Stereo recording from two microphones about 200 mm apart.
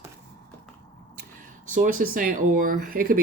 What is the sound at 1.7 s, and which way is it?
Speech, 40° right (ahead or behind).